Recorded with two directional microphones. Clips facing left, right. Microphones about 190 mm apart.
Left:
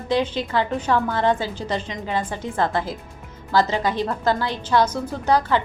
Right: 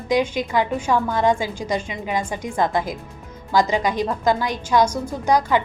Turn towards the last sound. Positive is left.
turn(degrees=-15)  # may be behind; listen again after turning